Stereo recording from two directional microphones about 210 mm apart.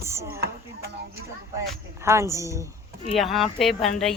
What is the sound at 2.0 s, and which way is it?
Speech, 15° right (ahead or behind).